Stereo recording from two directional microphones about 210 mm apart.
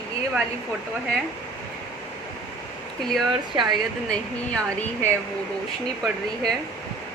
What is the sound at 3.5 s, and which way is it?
Speech, 20° right (ahead or behind).